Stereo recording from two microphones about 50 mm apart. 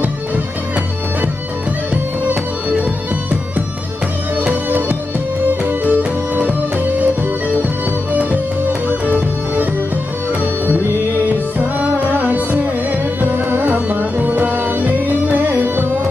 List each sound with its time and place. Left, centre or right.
4.6 s music: right
9.0 s music: right
11.8 s music: right